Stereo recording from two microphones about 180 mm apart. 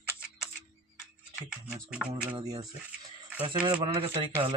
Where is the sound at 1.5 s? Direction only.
5° right (ahead or behind).